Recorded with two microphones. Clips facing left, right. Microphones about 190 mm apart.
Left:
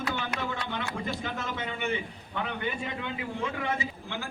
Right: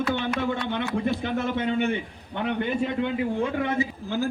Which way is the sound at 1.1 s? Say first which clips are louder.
Right 8 dB; 55° right (ahead or behind).